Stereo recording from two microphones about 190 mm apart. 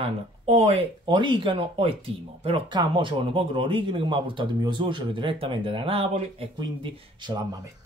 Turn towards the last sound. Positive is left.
turn(degrees=-25)  # may be behind; listen again after turning